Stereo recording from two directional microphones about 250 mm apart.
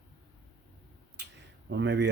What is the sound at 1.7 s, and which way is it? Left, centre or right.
Speech, right.